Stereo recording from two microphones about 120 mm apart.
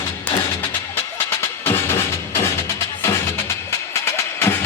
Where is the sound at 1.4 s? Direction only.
20° left (ahead or behind).